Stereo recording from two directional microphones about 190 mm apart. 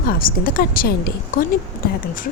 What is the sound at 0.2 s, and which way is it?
A woman's voice, 50° left (ahead or behind).